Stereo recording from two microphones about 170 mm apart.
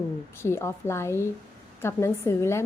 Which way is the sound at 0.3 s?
15° left (ahead or behind).